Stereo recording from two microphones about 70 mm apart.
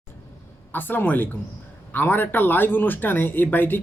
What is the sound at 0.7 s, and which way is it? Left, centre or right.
Speech, left.